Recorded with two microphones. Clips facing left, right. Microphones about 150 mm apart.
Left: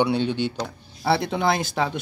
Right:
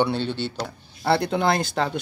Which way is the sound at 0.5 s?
Centre (ahead or behind).